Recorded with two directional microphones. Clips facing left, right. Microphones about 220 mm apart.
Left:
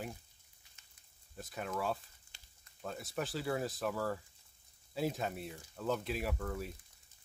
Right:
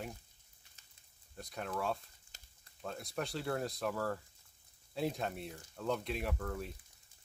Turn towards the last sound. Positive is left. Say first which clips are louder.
# left 1 dB
turn(degrees=0)  # may be behind; listen again after turning